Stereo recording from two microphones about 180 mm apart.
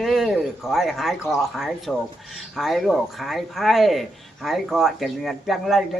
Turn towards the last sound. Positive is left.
turn(degrees=0)  # may be behind; listen again after turning